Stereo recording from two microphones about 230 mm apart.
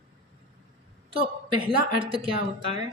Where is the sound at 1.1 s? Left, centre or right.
Right.